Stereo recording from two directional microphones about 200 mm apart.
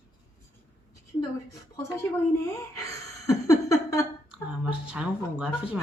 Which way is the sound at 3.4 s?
15° left (ahead or behind).